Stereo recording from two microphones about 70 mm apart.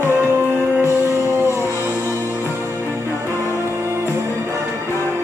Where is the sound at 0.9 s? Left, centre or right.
Right.